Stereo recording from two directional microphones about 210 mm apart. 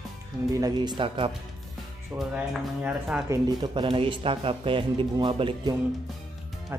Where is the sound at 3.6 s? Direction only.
25° right (ahead or behind).